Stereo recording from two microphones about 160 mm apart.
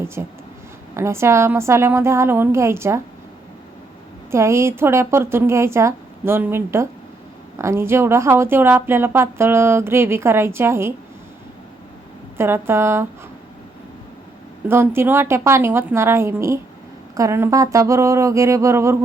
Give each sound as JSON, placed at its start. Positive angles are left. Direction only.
{"t": 0.0, "sound": "speech", "side_deg": -15}
{"t": 4.3, "sound": "speech", "side_deg": -15}
{"t": 12.4, "sound": "speech", "side_deg": -15}
{"t": 14.7, "sound": "speech", "side_deg": -15}